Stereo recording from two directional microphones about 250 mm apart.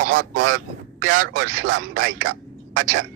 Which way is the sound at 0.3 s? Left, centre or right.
Right.